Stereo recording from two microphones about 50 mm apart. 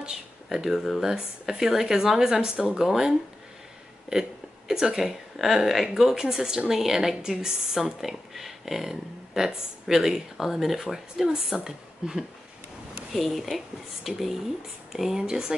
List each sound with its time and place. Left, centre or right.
0.0 s a woman's voice: centre
13.1 s a woman's voice: centre